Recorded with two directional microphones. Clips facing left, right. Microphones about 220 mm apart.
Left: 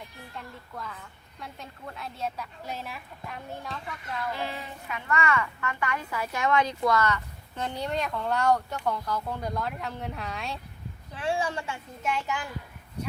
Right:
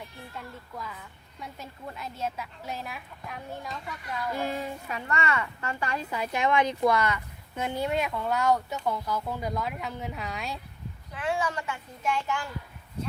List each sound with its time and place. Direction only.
0.3 s a woman's voice: centre (ahead or behind)
4.4 s a woman's voice: 45° right (ahead or behind); by 10.6 s centre (ahead or behind)
11.1 s a child's voice: 30° left (ahead or behind)